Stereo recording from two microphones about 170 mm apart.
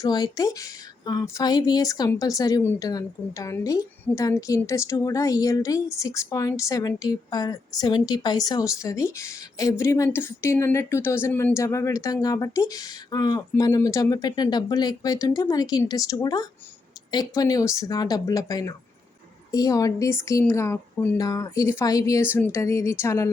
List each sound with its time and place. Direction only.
0.0 s a woman's voice: 20° left (ahead or behind)